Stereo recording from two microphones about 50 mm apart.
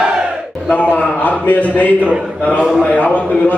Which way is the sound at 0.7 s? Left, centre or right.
Left.